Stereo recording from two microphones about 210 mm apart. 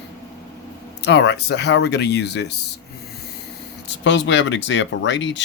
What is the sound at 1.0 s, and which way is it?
Speech, 55° left (ahead or behind).